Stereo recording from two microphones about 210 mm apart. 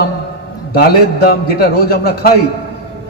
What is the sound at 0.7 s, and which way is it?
A man's voice, 45° left (ahead or behind).